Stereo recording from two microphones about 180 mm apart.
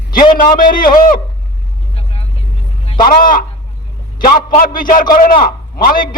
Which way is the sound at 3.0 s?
50° left (ahead or behind).